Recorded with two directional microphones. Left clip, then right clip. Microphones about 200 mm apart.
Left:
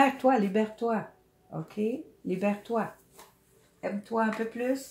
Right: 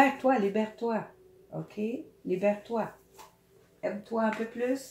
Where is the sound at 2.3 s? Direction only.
40° left (ahead or behind).